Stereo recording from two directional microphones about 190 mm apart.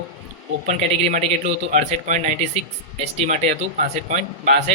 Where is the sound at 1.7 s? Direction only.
40° right (ahead or behind).